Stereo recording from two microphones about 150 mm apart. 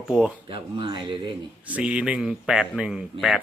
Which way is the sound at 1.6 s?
10° right (ahead or behind).